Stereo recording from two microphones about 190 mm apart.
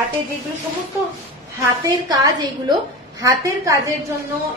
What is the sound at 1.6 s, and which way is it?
A woman's voice, 15° right (ahead or behind).